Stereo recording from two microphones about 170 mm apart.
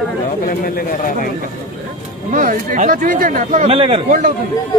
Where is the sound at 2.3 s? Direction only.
50° right (ahead or behind).